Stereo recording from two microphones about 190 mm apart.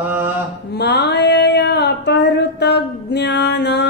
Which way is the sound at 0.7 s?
60° left (ahead or behind).